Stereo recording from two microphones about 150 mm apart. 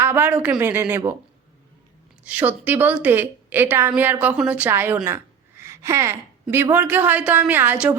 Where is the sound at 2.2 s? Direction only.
10° right (ahead or behind).